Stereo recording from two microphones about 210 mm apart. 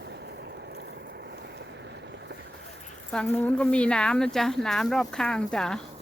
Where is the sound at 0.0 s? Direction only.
55° right (ahead or behind).